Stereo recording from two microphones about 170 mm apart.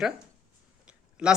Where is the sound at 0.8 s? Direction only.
5° right (ahead or behind).